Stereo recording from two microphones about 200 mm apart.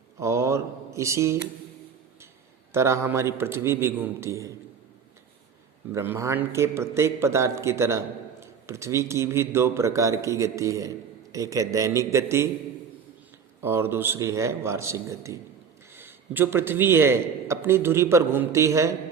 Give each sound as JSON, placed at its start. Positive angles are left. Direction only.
{"t": 0.2, "sound": "a sound", "side_deg": -15}
{"t": 2.7, "sound": "a man's voice", "side_deg": -15}
{"t": 5.9, "sound": "a man's voice", "side_deg": -10}
{"t": 13.6, "sound": "a man's voice", "side_deg": -10}